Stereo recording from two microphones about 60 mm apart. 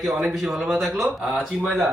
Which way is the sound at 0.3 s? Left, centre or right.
Centre.